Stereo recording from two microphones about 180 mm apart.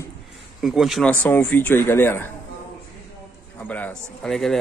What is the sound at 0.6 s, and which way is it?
Speech, centre (ahead or behind).